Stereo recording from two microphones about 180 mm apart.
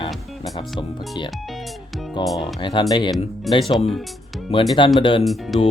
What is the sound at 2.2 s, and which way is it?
Speech, 25° left (ahead or behind).